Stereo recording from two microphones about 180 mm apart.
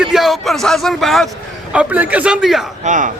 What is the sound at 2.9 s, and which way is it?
Speech, 45° right (ahead or behind).